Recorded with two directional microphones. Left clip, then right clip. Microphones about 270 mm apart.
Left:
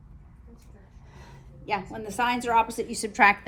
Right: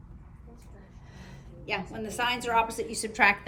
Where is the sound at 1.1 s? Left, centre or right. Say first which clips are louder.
Even; centre.